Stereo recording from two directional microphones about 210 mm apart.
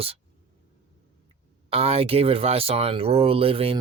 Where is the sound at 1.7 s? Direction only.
30° right (ahead or behind).